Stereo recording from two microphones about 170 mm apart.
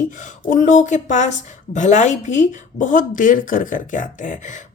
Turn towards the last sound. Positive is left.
turn(degrees=50)  # may be behind; listen again after turning